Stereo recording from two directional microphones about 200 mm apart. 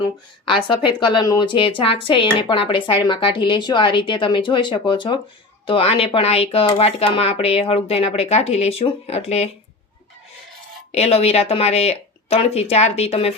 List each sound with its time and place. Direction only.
0.4 s a woman's voice: 25° left (ahead or behind)
10.9 s speech: 30° left (ahead or behind)